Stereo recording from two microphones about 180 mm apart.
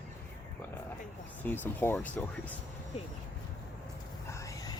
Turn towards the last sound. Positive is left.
turn(degrees=15)  # may be behind; listen again after turning